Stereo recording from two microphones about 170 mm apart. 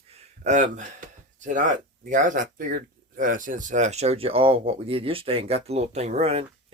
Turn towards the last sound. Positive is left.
turn(degrees=-35)  # may be behind; listen again after turning